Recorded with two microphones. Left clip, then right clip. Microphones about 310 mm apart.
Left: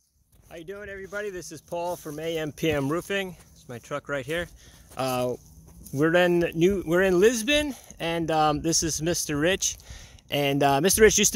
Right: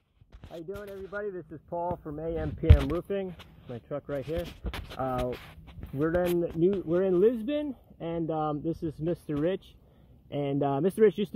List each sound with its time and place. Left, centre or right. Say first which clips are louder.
0.7 s speech: left 3 dB; centre
2.3 s speech: left 5 dB; left
3.1 s speech: left 4 dB; left
4.9 s speech: left 4 dB; left
5.9 s speech: left 6 dB; left
6.6 s speech: left 3 dB; left